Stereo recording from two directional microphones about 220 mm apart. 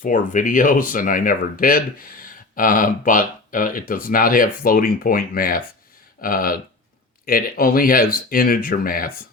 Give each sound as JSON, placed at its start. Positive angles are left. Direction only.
{"t": 0.0, "sound": "speech", "side_deg": 35}